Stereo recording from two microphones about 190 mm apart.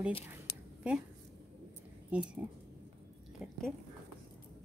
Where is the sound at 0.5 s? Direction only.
60° left (ahead or behind).